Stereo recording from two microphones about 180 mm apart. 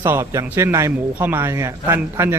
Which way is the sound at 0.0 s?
15° right (ahead or behind).